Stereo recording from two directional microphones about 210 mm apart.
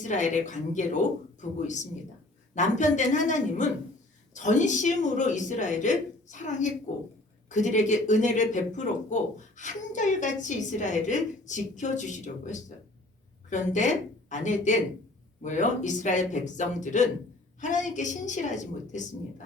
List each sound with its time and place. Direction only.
0.0 s a woman's voice: 35° left (ahead or behind)